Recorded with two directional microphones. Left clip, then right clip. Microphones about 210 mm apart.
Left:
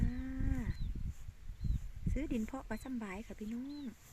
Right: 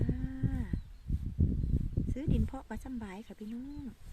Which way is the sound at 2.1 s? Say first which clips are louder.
Even; 15° right (ahead or behind).